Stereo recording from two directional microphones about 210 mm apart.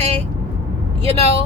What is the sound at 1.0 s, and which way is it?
Speech, 30° right (ahead or behind).